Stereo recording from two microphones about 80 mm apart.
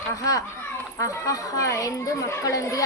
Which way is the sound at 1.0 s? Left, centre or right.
Left.